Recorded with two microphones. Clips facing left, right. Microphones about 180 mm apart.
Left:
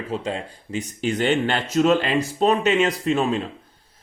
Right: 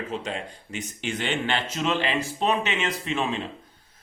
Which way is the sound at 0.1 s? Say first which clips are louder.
Left 4 dB; 30° left (ahead or behind).